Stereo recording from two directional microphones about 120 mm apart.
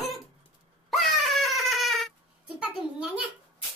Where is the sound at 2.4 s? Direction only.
10° right (ahead or behind).